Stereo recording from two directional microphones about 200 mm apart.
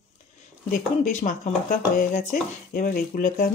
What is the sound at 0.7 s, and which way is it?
Speech, 40° left (ahead or behind).